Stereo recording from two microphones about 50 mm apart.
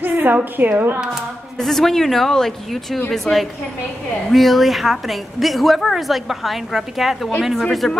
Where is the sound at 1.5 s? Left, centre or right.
Centre.